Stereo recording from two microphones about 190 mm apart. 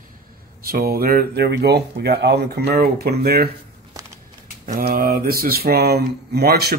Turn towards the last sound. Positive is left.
turn(degrees=-55)  # may be behind; listen again after turning